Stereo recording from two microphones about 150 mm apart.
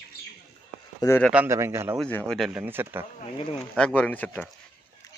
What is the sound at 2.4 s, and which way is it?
Speech, 5° right (ahead or behind).